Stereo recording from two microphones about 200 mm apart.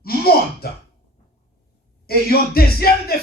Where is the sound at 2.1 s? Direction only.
50° left (ahead or behind).